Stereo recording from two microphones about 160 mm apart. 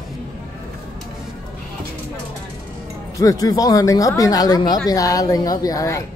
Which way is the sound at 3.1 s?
20° left (ahead or behind).